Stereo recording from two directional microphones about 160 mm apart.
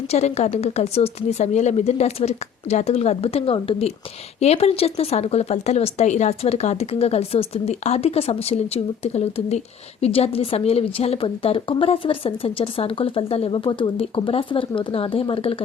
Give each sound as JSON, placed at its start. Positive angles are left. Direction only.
{"t": 0.1, "sound": "speech", "side_deg": 45}